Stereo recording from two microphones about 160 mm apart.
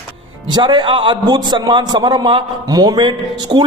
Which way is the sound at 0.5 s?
30° right (ahead or behind).